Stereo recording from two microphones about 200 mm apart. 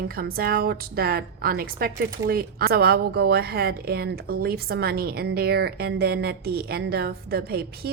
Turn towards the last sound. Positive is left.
turn(degrees=-50)  # may be behind; listen again after turning